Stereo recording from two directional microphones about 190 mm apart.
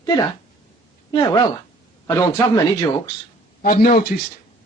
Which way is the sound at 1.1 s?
20° left (ahead or behind).